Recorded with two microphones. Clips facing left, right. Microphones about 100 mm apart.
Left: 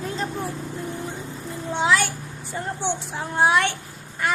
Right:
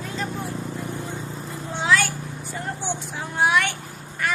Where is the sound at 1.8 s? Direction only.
20° left (ahead or behind).